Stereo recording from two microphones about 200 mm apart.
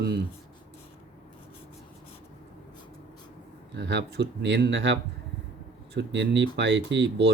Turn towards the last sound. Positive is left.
turn(degrees=-65)  # may be behind; listen again after turning